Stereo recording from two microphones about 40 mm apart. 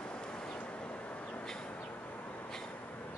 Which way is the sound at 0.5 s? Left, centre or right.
Left.